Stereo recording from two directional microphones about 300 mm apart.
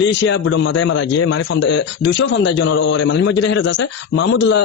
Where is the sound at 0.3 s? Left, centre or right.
Left.